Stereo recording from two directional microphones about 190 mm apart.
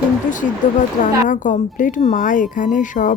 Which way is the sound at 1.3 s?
45° left (ahead or behind).